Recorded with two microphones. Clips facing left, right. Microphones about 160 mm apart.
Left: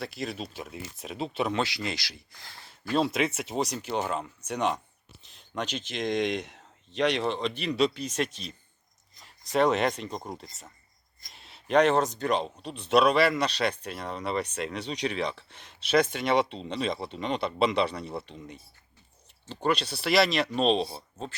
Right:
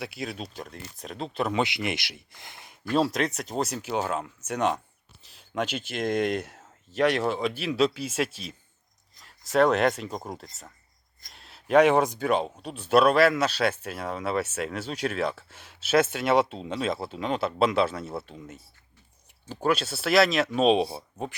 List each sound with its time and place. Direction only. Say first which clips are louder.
0.0 s speech: even; centre (ahead or behind)
1.5 s speech: right 3 dB; 20° right (ahead or behind)
2.9 s speech: right 1 dB; centre (ahead or behind); by 21.3 s 15° right (ahead or behind)